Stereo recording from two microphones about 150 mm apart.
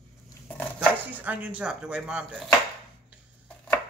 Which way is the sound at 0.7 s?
10° right (ahead or behind).